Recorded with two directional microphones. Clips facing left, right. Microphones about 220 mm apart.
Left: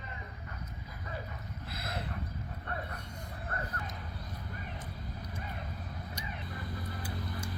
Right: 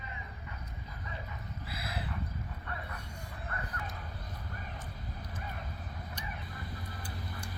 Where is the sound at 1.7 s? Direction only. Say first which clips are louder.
Left 1 dB; 5° right (ahead or behind).